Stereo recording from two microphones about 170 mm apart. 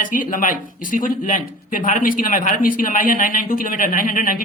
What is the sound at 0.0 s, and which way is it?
A man's voice, 50° left (ahead or behind).